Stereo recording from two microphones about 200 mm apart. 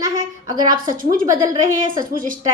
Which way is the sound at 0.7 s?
45° right (ahead or behind).